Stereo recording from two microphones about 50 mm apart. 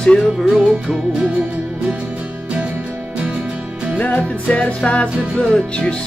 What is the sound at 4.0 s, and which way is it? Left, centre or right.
Music, left.